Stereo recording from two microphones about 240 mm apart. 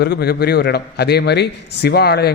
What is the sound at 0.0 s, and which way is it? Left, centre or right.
A man's voice, left.